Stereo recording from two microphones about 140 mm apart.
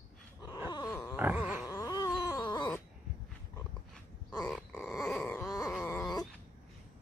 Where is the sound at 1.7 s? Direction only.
25° left (ahead or behind).